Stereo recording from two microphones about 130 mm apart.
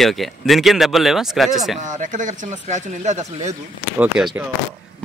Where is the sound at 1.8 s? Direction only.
80° right; by 3.5 s 60° right (ahead or behind).